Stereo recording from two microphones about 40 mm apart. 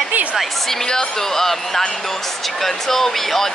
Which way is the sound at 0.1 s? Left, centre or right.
Right.